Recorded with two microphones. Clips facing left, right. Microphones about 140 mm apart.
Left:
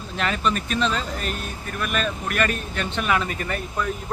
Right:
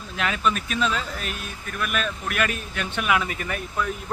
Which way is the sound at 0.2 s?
5° right (ahead or behind).